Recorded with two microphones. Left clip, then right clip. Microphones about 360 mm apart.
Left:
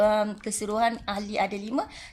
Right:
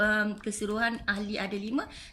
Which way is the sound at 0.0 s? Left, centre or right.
Centre.